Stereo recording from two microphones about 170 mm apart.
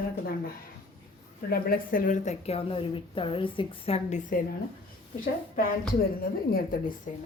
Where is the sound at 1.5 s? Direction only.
60° left (ahead or behind).